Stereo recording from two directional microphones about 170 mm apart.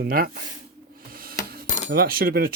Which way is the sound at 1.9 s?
60° right (ahead or behind).